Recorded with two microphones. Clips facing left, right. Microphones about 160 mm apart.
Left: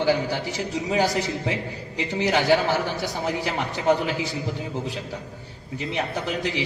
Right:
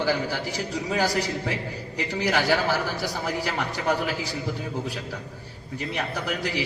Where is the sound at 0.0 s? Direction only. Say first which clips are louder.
Left 3 dB; 20° left (ahead or behind).